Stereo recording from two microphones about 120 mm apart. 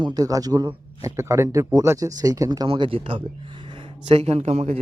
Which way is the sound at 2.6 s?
50° right (ahead or behind).